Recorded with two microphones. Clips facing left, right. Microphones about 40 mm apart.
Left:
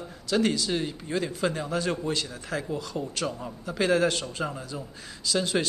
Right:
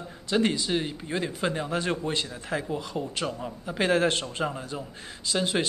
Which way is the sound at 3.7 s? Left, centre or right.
Right.